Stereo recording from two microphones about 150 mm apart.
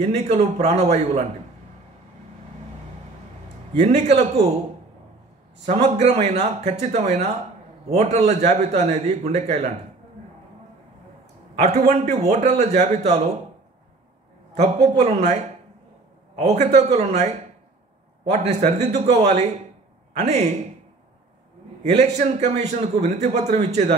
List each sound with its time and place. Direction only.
0.0 s a man's voice: 45° right (ahead or behind)
3.8 s a man's voice: 50° right (ahead or behind)
5.7 s a man's voice: 45° right (ahead or behind)
11.5 s a man's voice: 45° right (ahead or behind)
14.6 s a man's voice: 45° right (ahead or behind)
16.3 s a man's voice: 45° right (ahead or behind)
22.0 s a man's voice: 45° right (ahead or behind)